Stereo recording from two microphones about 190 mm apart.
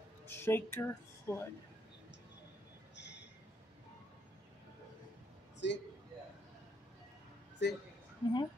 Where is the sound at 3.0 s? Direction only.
65° left (ahead or behind).